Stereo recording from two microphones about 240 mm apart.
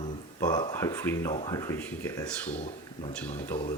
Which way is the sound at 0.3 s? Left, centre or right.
Centre.